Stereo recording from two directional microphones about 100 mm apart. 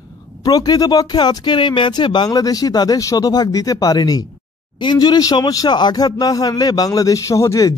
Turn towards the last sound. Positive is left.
turn(degrees=35)  # may be behind; listen again after turning